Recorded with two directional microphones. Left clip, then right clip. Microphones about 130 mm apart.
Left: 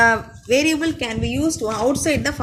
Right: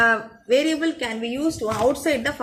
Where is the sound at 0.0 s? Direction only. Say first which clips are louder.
Left 3 dB; 35° left (ahead or behind).